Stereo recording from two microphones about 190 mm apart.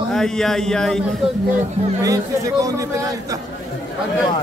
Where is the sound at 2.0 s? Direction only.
20° right (ahead or behind).